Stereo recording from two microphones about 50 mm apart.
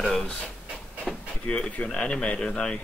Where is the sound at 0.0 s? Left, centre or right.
Centre.